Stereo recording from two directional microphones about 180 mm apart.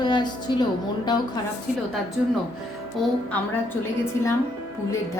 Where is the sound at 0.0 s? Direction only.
25° left (ahead or behind).